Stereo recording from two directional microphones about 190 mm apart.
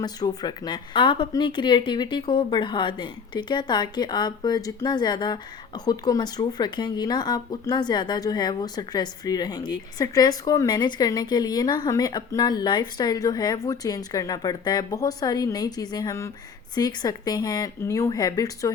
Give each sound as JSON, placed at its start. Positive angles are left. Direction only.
{"t": 0.0, "sound": "speech", "side_deg": 20}